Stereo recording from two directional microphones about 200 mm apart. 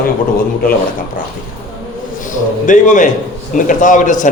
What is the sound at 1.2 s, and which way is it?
A man's voice, 40° left (ahead or behind).